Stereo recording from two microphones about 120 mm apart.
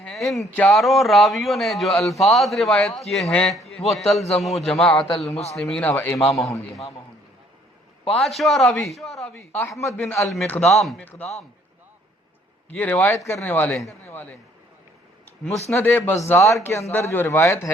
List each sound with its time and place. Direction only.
0.0 s a sound: 5° left (ahead or behind)
0.7 s speech: centre (ahead or behind)
4.2 s a man's voice: 65° left (ahead or behind)
4.4 s speech: centre (ahead or behind)
5.3 s a man's voice: 65° left (ahead or behind)
5.5 s speech: centre (ahead or behind)
5.9 s a man's voice: 20° left (ahead or behind)
8.1 s speech: centre (ahead or behind)
9.3 s speech: 15° left (ahead or behind)
10.6 s speech: centre (ahead or behind)
11.0 s a man's voice: 10° left (ahead or behind)
12.7 s speech: 15° left (ahead or behind)
15.7 s speech: 20° left (ahead or behind)